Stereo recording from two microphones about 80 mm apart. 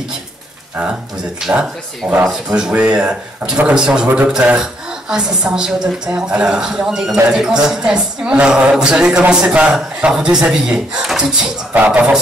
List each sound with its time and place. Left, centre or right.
1.5 s a woman's voice: centre